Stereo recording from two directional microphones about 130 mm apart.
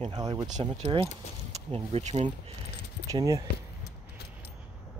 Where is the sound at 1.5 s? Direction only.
50° right (ahead or behind).